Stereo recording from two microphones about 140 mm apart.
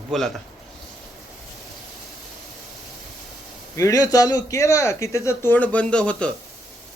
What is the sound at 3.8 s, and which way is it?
A man's voice, 25° left (ahead or behind).